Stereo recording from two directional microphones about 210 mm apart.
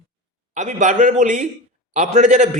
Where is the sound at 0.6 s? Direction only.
35° right (ahead or behind).